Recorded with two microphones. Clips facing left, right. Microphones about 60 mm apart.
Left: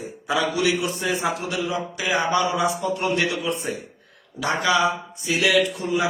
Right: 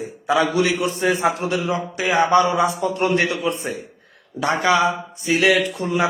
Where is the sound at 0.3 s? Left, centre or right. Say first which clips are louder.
Right 4 dB; right.